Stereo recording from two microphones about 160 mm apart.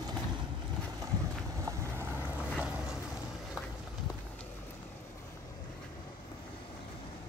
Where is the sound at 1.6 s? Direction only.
20° right (ahead or behind).